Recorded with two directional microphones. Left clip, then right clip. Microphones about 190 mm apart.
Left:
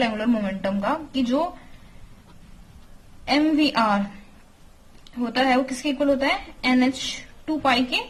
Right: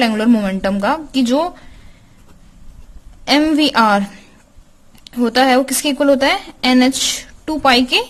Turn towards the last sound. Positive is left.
turn(degrees=-60)  # may be behind; listen again after turning